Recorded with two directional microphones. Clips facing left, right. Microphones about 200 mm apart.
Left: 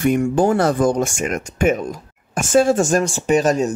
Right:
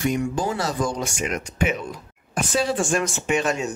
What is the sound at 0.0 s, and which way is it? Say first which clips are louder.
Speech: left 7 dB; 55° left (ahead or behind).